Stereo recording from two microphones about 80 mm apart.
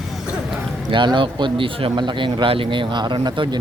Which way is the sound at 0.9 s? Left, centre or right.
Right.